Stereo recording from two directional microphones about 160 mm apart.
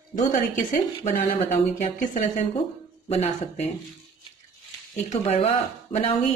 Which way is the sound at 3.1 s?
40° left (ahead or behind).